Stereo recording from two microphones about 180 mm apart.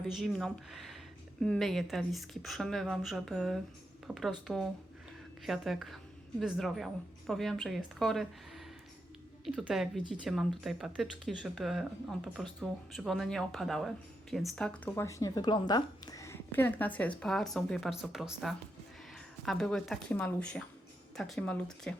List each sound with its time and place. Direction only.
0.1 s speech: centre (ahead or behind)
15.0 s a woman's voice: 20° left (ahead or behind)